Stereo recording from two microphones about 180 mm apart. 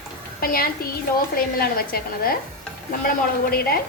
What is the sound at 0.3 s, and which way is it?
A woman's voice, 55° left (ahead or behind).